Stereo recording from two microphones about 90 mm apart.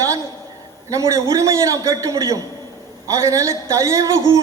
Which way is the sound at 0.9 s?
35° right (ahead or behind).